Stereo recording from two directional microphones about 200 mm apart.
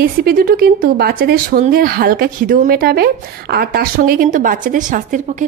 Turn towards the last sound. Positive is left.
turn(degrees=-40)  # may be behind; listen again after turning